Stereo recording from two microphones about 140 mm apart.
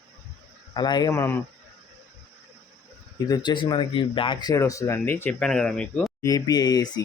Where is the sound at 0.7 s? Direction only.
30° left (ahead or behind).